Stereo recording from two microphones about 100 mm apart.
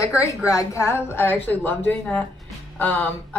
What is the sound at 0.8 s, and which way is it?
Speech, 20° left (ahead or behind).